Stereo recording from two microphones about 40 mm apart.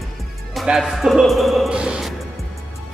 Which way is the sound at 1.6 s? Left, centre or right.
Right.